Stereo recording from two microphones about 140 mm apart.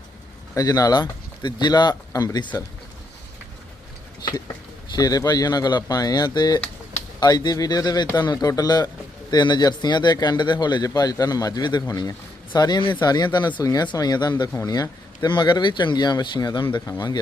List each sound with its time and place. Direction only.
0.5 s speech: 25° left (ahead or behind)
4.9 s speech: 25° left (ahead or behind)